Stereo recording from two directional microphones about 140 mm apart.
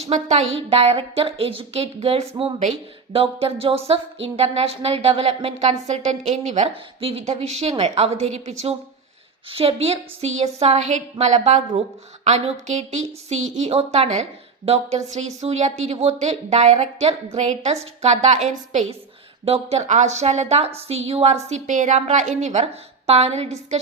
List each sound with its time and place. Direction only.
0.0 s speech: 55° right (ahead or behind)
19.5 s speech: 45° right (ahead or behind)
21.5 s a woman's voice: 60° right (ahead or behind)